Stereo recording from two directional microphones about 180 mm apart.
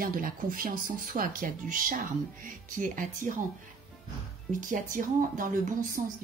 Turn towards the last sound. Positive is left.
turn(degrees=-50)  # may be behind; listen again after turning